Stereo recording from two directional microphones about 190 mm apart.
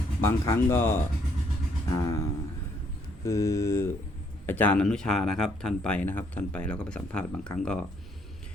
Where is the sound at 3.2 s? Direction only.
15° left (ahead or behind).